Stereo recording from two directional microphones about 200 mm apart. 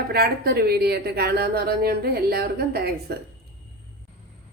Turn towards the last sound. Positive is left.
turn(degrees=-50)  # may be behind; listen again after turning